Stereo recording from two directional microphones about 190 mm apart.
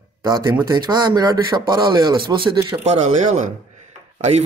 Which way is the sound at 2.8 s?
35° right (ahead or behind).